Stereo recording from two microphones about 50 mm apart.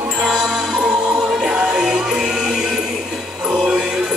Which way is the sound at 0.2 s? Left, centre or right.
Centre.